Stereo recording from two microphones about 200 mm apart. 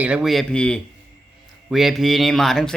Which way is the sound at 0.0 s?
5° right (ahead or behind).